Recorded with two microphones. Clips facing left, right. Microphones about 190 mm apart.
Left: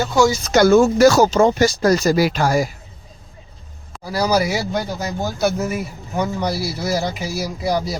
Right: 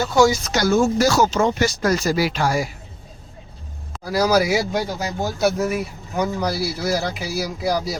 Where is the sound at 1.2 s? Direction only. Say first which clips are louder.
Left 4 dB; 35° left (ahead or behind).